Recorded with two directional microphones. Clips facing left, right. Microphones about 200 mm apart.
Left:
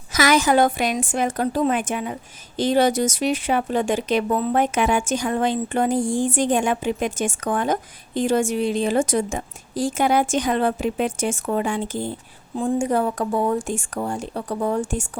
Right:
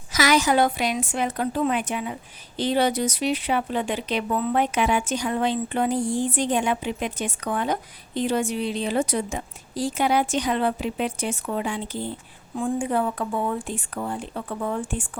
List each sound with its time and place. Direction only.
0.1 s speech: 50° left (ahead or behind)